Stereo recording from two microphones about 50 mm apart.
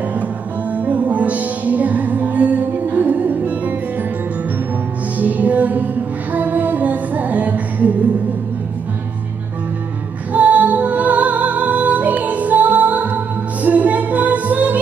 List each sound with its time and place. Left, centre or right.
0.7 s music: right
5.2 s music: right
10.3 s music: right